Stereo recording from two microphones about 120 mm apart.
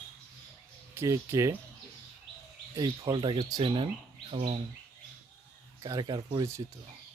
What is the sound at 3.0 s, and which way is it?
Speech, 40° right (ahead or behind).